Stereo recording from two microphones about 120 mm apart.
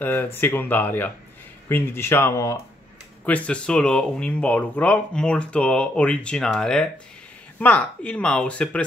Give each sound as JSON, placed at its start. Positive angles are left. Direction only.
{"t": 0.0, "sound": "speech", "side_deg": 20}
{"t": 3.3, "sound": "speech", "side_deg": 10}